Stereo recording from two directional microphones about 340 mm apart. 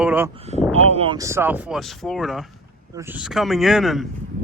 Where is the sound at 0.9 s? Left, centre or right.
Centre.